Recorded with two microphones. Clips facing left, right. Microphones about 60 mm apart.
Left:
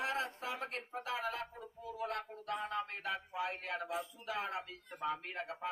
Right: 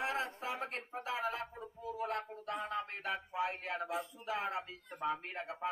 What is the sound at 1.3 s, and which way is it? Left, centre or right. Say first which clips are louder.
Music: right 1 dB; centre.